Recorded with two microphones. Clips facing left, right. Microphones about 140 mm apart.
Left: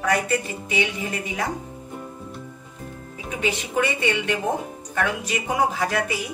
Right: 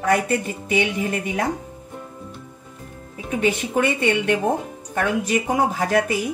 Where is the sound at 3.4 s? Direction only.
50° right (ahead or behind).